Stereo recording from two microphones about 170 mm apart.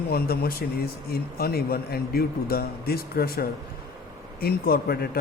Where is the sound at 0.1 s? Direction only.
65° left (ahead or behind).